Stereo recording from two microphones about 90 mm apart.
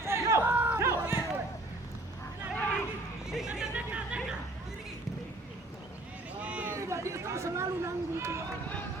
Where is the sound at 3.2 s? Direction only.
5° right (ahead or behind).